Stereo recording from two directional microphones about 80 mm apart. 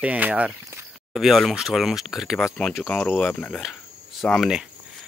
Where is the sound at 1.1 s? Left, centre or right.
Centre.